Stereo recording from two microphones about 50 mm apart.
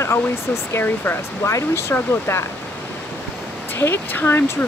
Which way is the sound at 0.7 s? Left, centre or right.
Left.